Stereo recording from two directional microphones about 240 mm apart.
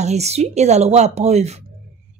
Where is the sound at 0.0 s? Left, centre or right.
Right.